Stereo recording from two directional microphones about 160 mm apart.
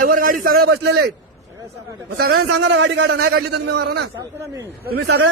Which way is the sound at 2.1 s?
75° right (ahead or behind).